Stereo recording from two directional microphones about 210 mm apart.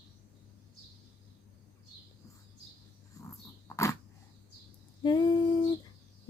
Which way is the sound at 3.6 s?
15° left (ahead or behind).